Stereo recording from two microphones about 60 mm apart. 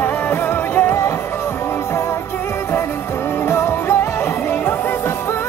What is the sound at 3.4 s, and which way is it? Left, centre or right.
Music, left.